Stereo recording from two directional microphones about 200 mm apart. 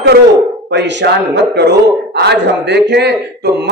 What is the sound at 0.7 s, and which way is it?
A man's voice, 60° right (ahead or behind).